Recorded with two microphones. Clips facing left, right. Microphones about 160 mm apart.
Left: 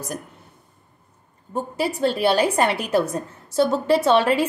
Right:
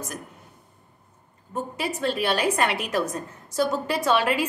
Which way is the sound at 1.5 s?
30° left (ahead or behind).